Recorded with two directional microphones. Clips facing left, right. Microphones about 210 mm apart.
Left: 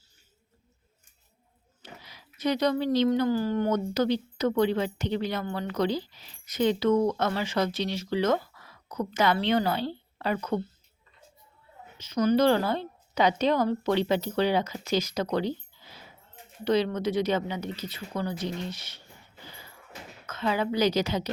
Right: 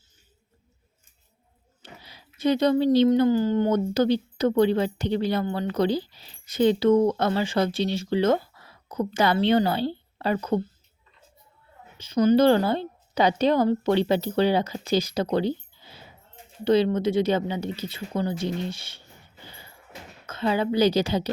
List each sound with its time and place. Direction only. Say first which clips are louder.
2.0 s speech: right 4 dB; 30° right (ahead or behind)
11.9 s speech: right 4 dB; 30° right (ahead or behind)
20.2 s speech: right 4 dB; 30° right (ahead or behind)